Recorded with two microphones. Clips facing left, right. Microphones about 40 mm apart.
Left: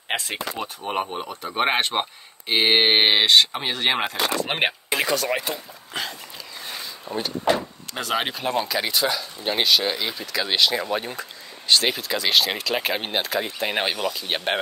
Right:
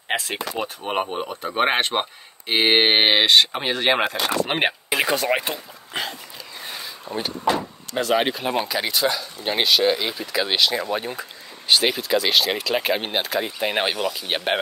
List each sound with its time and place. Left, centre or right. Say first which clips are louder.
0.3 s speech: right 2 dB; centre
4.9 s speech: right 3 dB; right
5.9 s dog: right 2 dB; right
6.7 s a sound: even; centre
7.9 s speech: right 5 dB; centre
10.6 s speech: even; centre